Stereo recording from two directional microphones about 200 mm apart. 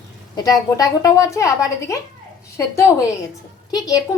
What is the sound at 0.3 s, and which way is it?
A woman's voice, 15° left (ahead or behind).